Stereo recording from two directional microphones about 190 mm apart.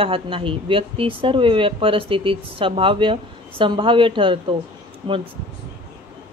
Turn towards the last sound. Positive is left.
turn(degrees=-25)  # may be behind; listen again after turning